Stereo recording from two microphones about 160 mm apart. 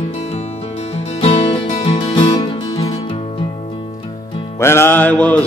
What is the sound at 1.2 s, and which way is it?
Music, 40° left (ahead or behind).